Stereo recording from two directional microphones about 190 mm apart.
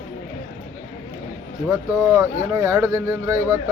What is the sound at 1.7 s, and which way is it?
Speech, 15° right (ahead or behind).